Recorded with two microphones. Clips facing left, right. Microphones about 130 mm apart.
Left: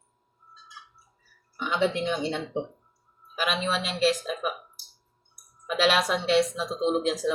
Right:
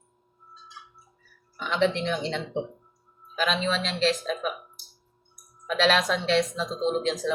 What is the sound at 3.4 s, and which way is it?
A woman's voice, 10° left (ahead or behind).